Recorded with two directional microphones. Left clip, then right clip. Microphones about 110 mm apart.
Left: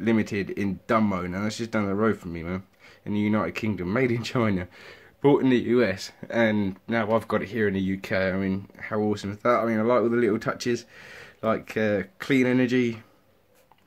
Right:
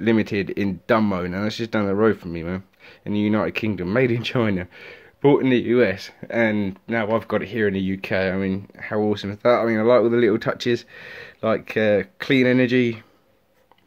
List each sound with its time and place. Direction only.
0.0 s speech: 25° right (ahead or behind)